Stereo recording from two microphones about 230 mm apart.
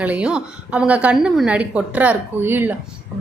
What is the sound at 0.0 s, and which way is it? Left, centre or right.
A woman's voice, centre.